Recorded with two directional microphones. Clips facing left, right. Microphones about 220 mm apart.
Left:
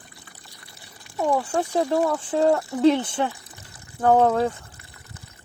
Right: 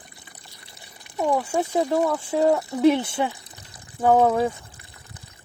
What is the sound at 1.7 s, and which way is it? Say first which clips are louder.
Speech: even; 20° right (ahead or behind).